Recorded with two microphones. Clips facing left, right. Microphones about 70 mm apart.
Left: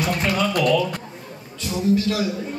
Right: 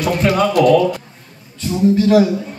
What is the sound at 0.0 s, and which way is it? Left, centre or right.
Music, right.